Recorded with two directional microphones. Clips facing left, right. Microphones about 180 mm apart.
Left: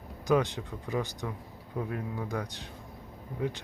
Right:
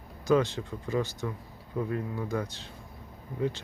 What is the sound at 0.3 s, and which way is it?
Speech, 15° left (ahead or behind).